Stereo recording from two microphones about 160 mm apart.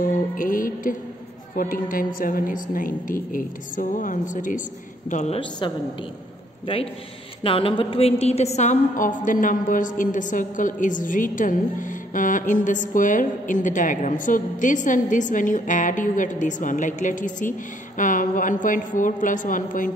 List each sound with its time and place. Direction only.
0.0 s music: 60° left (ahead or behind)
1.5 s a woman's voice: 55° left (ahead or behind)
7.4 s a woman's voice: 35° left (ahead or behind); by 19.9 s 55° left (ahead or behind)